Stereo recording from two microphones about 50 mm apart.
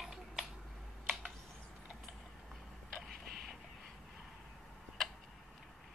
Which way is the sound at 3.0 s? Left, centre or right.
Centre.